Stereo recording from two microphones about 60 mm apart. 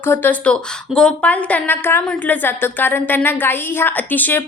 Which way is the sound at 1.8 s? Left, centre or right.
Left.